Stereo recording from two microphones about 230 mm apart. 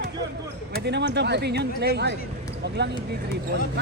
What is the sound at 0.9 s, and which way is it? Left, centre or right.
Speech, right.